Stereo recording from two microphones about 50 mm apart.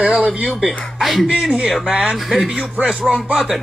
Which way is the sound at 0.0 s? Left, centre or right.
Centre.